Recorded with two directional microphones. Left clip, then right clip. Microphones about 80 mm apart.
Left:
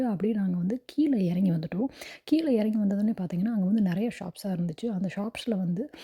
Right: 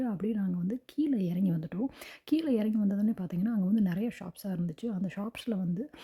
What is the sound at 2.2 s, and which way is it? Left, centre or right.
A woman's voice, centre.